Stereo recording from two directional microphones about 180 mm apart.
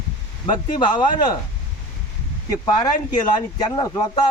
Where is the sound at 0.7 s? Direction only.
25° left (ahead or behind).